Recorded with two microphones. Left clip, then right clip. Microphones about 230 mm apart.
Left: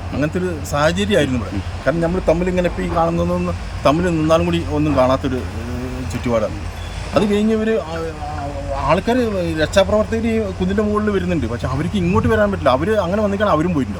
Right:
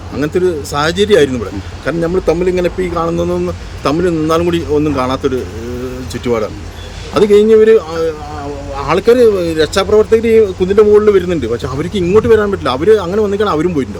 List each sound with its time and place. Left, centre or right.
0.2 s speech: centre
7.1 s speech: centre